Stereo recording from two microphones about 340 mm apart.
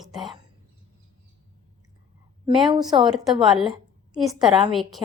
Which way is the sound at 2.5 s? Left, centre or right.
Centre.